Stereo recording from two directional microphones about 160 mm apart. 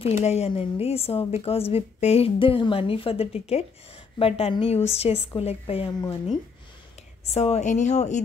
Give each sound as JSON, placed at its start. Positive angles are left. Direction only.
{"t": 0.0, "sound": "a woman's voice", "side_deg": 40}
{"t": 5.9, "sound": "speech", "side_deg": 25}
{"t": 7.3, "sound": "speech", "side_deg": 40}